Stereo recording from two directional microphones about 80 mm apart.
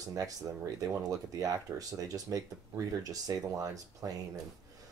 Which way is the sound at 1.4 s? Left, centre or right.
Right.